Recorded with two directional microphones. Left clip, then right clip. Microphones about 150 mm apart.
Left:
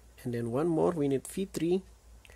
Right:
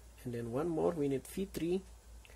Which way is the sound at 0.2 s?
45° left (ahead or behind).